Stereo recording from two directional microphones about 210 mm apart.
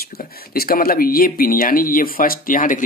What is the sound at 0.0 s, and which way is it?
Speech, 45° left (ahead or behind).